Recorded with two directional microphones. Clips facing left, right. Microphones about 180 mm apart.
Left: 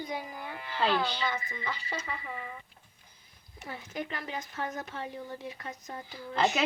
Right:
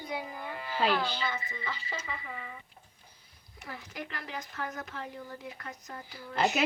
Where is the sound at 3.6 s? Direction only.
25° left (ahead or behind).